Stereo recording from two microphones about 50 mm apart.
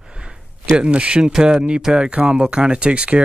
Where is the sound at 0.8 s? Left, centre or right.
Right.